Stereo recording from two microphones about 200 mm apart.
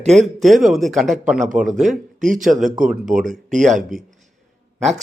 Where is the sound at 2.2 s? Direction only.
40° right (ahead or behind).